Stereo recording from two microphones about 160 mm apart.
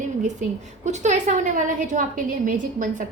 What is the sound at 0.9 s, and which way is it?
A woman's voice, 45° right (ahead or behind).